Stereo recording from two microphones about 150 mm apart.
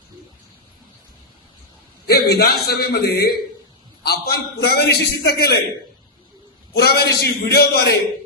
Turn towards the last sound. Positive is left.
turn(degrees=90)